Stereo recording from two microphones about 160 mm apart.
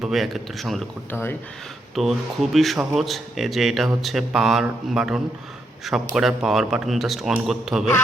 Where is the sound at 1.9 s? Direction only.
Centre (ahead or behind).